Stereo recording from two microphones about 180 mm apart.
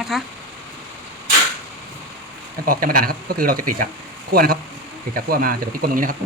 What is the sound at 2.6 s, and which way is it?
Speech, 50° right (ahead or behind).